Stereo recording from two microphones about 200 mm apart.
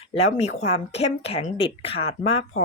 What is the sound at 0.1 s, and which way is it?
A woman's voice, 30° left (ahead or behind).